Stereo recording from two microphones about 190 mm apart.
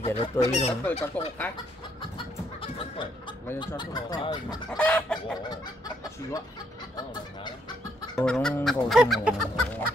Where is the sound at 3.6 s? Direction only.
20° left (ahead or behind).